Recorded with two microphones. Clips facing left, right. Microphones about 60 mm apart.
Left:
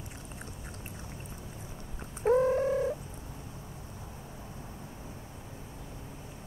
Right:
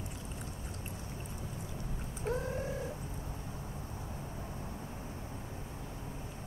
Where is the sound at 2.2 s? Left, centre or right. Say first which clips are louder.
Left 12 dB; left.